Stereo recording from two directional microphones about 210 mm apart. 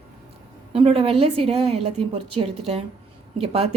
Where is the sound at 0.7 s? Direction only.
30° right (ahead or behind).